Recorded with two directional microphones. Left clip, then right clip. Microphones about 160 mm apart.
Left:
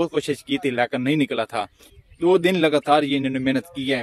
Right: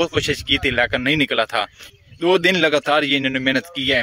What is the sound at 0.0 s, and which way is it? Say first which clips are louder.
A man's voice: right 3 dB; centre (ahead or behind).